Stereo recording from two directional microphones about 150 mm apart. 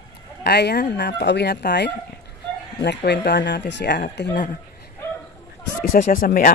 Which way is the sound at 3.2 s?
90° left.